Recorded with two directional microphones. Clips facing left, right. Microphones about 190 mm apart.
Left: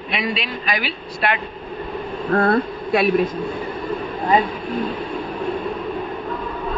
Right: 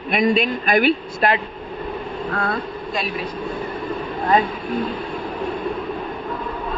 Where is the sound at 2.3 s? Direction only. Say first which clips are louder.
Left 9 dB; 60° left (ahead or behind).